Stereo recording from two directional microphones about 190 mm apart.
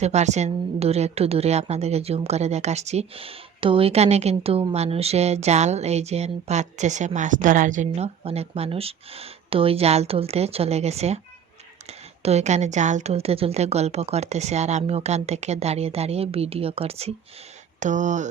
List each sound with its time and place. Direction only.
0.0 s a woman's voice: 35° right (ahead or behind)